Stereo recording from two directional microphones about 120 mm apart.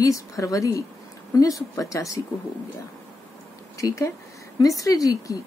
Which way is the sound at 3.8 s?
25° left (ahead or behind).